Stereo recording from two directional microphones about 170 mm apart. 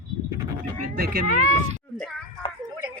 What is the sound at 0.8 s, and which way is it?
Speech, 65° right (ahead or behind).